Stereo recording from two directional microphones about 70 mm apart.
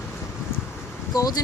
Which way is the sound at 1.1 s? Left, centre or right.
Left.